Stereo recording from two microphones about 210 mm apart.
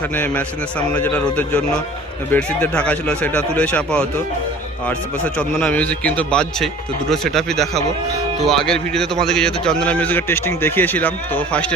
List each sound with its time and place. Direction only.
0.2 s a man's voice: 5° left (ahead or behind)
5.4 s a man's voice: 5° left (ahead or behind)